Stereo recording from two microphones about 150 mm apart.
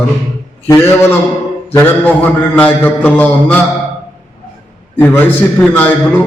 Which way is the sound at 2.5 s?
10° left (ahead or behind).